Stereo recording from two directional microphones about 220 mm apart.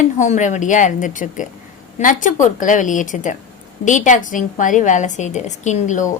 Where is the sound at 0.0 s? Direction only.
35° left (ahead or behind).